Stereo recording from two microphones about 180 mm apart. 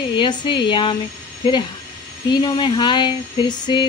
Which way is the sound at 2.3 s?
25° left (ahead or behind).